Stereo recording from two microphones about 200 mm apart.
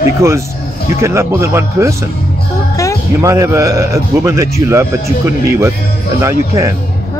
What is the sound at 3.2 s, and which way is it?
Speech, 15° right (ahead or behind).